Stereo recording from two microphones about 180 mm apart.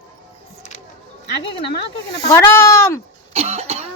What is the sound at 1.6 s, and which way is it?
Speech, 65° left (ahead or behind).